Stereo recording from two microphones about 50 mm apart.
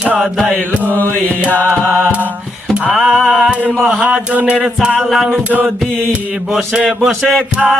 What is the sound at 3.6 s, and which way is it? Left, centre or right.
Music, centre.